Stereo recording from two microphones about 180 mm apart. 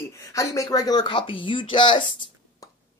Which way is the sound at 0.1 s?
20° left (ahead or behind).